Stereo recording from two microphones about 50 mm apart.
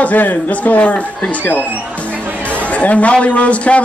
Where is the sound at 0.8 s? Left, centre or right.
Left.